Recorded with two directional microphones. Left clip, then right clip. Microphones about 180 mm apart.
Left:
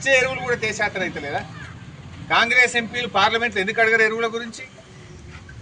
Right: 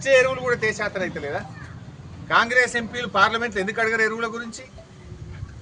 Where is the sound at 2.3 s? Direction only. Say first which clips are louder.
Left 2 dB; 25° right (ahead or behind).